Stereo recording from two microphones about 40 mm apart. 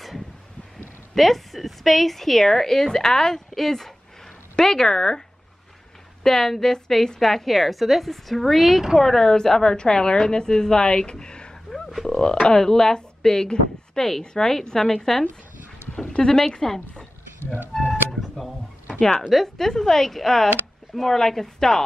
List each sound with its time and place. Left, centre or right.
1.1 s speech: centre
6.2 s a woman's voice: centre
16.3 s speech: centre
18.9 s a woman's voice: left
19.3 s speech: centre